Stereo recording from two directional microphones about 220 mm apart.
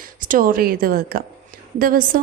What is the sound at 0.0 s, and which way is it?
A woman's voice, 40° right (ahead or behind).